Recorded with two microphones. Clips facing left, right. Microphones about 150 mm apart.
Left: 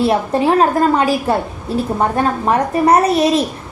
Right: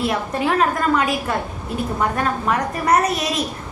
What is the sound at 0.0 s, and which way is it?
A woman's voice, 30° left (ahead or behind).